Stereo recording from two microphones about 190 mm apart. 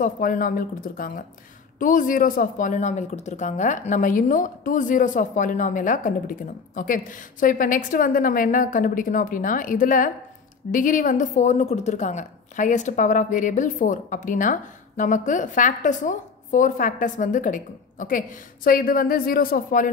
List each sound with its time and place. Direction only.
0.0 s speech: 45° left (ahead or behind)